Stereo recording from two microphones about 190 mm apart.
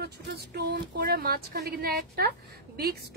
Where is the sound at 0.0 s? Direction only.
55° right (ahead or behind).